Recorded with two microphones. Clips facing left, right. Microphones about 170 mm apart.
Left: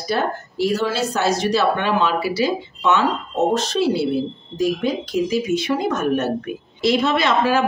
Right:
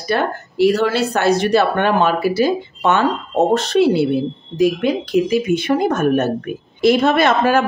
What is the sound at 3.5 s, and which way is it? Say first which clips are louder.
A woman's voice: right 5 dB; 60° right (ahead or behind).